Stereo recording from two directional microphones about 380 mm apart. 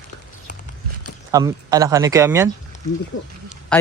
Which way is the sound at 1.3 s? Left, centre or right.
Centre.